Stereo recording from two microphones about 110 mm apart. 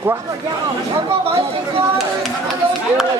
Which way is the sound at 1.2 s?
65° right (ahead or behind).